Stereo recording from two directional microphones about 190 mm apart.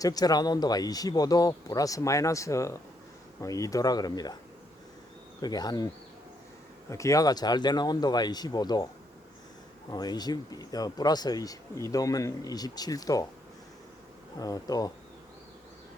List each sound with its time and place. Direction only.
0.0 s speech: 20° left (ahead or behind)
5.4 s speech: 20° left (ahead or behind)
6.9 s speech: 15° left (ahead or behind)
9.9 s speech: 20° left (ahead or behind)
14.3 s speech: 20° left (ahead or behind)